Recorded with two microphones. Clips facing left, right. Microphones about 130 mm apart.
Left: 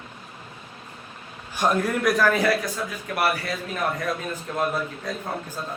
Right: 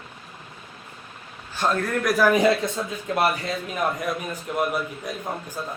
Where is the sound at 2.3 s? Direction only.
20° right (ahead or behind).